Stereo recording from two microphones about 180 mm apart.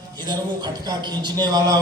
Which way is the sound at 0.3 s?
25° right (ahead or behind).